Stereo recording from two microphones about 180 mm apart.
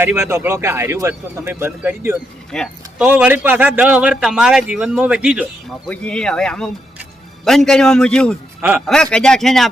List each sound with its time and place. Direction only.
0.0 s a man's voice: 15° right (ahead or behind)
2.5 s speech: 5° left (ahead or behind)
3.1 s a man's voice: 10° right (ahead or behind)
5.9 s a man's voice: 5° left (ahead or behind)